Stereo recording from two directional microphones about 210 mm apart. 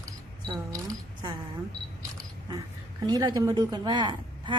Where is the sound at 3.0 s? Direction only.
20° right (ahead or behind).